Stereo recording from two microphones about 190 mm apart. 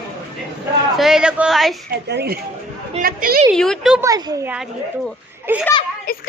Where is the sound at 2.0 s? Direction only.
60° right (ahead or behind).